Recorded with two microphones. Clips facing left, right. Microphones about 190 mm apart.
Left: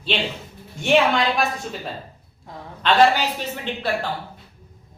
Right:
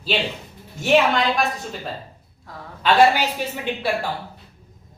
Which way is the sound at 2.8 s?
10° right (ahead or behind).